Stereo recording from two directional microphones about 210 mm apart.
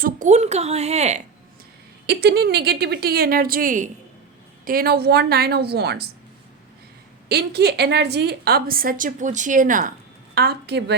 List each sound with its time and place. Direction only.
0.0 s a woman's voice: 35° right (ahead or behind)
2.0 s a woman's voice: 50° right (ahead or behind)
7.3 s a woman's voice: 50° right (ahead or behind)
10.3 s a woman's voice: 50° right (ahead or behind)